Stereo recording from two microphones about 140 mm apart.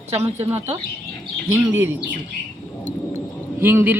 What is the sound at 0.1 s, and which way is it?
Speech, 15° right (ahead or behind).